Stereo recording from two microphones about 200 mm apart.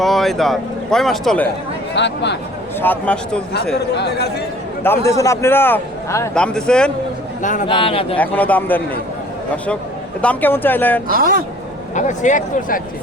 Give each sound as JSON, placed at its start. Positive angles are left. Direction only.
{"t": 0.0, "sound": "speech", "side_deg": 0}
{"t": 2.0, "sound": "speech", "side_deg": 60}
{"t": 2.8, "sound": "a man's voice", "side_deg": 10}
{"t": 3.9, "sound": "speech", "side_deg": 55}
{"t": 5.1, "sound": "a man's voice", "side_deg": 15}
{"t": 6.3, "sound": "speech", "side_deg": 5}
{"t": 7.7, "sound": "a man's voice", "side_deg": 25}
{"t": 8.2, "sound": "a man's voice", "side_deg": 10}
{"t": 10.2, "sound": "a man's voice", "side_deg": 10}
{"t": 11.1, "sound": "speech", "side_deg": -45}
{"t": 11.9, "sound": "speech", "side_deg": 40}